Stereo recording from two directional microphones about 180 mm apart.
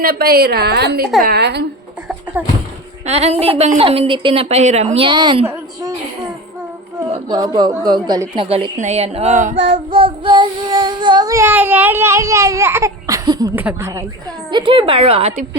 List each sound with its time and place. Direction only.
0.0 s a woman's voice: 55° right (ahead or behind)
2.4 s speech: 10° right (ahead or behind)
3.1 s a woman's voice: 35° right (ahead or behind)
7.1 s a woman's voice: 25° right (ahead or behind); by 9.6 s 40° right (ahead or behind)
9.6 s child singing: 30° right (ahead or behind)
13.6 s speech: 10° right (ahead or behind)
14.5 s a woman's voice: 25° right (ahead or behind)